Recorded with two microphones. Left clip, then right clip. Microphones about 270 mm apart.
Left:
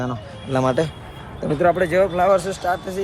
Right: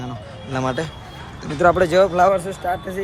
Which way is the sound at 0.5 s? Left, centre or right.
Centre.